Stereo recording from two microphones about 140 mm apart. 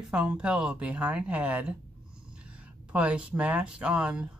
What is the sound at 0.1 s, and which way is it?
Speech, 5° right (ahead or behind).